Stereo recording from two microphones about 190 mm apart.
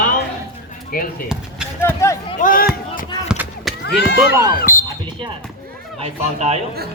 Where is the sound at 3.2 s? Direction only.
5° right (ahead or behind).